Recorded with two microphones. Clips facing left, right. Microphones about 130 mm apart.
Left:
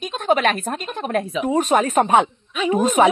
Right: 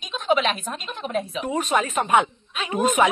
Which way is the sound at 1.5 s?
45° left (ahead or behind).